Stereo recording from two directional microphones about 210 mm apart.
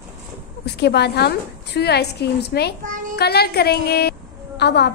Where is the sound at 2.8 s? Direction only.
40° right (ahead or behind).